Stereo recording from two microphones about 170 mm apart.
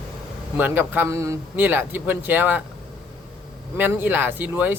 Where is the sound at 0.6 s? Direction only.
10° right (ahead or behind).